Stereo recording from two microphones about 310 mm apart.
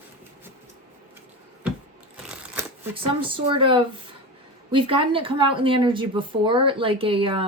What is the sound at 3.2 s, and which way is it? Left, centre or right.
Speech, centre.